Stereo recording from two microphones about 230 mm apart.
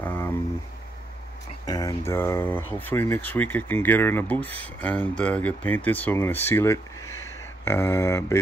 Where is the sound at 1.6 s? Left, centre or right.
Centre.